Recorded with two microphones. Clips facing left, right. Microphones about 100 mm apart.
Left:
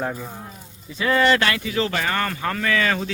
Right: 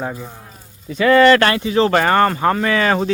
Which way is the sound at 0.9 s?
70° right (ahead or behind).